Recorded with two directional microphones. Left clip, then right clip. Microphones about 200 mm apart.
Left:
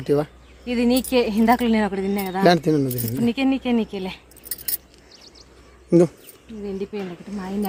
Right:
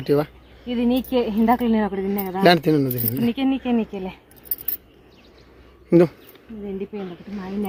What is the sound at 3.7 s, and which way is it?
Speech, 20° right (ahead or behind).